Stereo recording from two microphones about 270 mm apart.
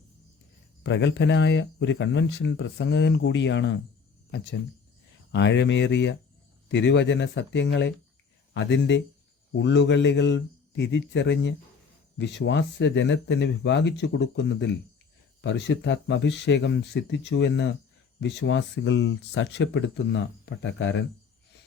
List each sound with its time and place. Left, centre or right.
0.8 s speech: left
5.3 s speech: left